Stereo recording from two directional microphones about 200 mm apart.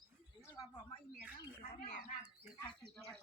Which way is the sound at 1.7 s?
40° left (ahead or behind).